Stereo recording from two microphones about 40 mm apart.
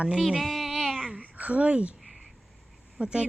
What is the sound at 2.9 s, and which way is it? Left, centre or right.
Speech, right.